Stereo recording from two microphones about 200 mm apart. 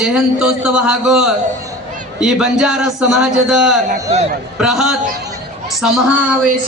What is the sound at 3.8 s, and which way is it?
Speech, 35° right (ahead or behind).